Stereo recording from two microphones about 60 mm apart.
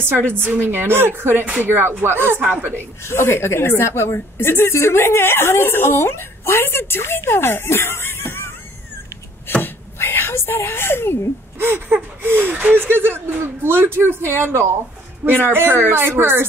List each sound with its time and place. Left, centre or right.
0.3 s speech: right
3.1 s a woman's voice: left
9.5 s a sound: left
11.5 s speech: right